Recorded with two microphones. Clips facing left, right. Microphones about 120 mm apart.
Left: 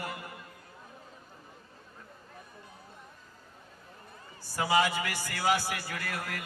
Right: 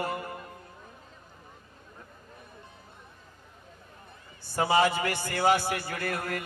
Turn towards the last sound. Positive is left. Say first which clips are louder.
# right 5 dB
turn(degrees=-45)  # may be behind; listen again after turning